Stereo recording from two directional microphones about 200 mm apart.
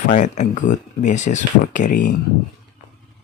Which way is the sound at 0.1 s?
40° left (ahead or behind).